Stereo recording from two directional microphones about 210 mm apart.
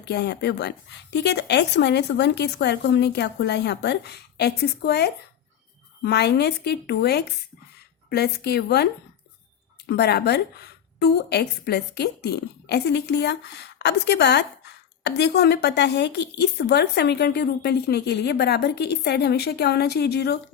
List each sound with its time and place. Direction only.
0.0 s a woman's voice: 55° left (ahead or behind)